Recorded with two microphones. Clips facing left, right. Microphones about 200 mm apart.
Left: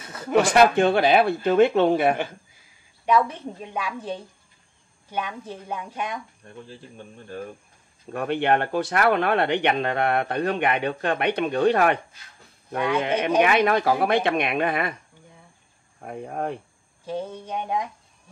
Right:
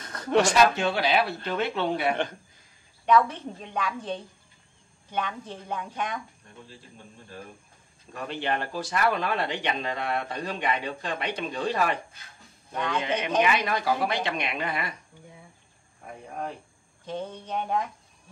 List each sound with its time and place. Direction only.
0.0 s a sound: 5° left (ahead or behind)
0.4 s speech: 55° left (ahead or behind)
3.3 s a woman's voice: 10° left (ahead or behind)
8.1 s speech: 60° left (ahead or behind)
13.0 s speech: 55° left (ahead or behind)
16.0 s speech: 55° left (ahead or behind)
17.0 s a woman's voice: 10° left (ahead or behind)